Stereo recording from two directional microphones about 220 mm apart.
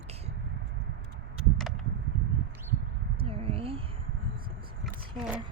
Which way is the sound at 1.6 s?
Centre (ahead or behind).